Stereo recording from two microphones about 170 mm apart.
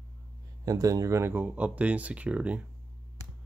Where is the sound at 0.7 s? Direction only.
20° right (ahead or behind).